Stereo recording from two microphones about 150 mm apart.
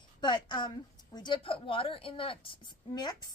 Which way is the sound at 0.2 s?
30° left (ahead or behind).